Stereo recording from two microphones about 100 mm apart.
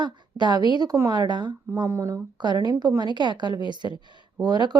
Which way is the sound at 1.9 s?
30° right (ahead or behind).